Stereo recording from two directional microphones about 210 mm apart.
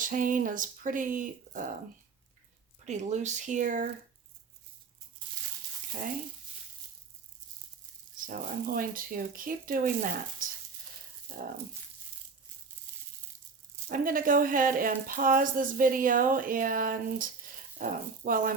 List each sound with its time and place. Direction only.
0.0 s speech: 40° right (ahead or behind)
2.8 s speech: 35° right (ahead or behind)
8.3 s speech: 40° right (ahead or behind)
11.3 s speech: 40° right (ahead or behind)
13.8 s speech: 40° right (ahead or behind)